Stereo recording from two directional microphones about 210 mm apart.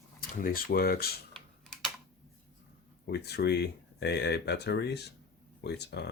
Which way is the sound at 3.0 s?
50° left (ahead or behind).